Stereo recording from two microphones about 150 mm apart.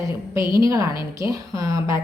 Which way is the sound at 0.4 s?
30° left (ahead or behind).